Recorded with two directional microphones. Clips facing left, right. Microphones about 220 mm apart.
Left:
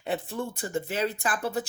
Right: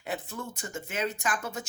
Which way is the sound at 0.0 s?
30° left (ahead or behind).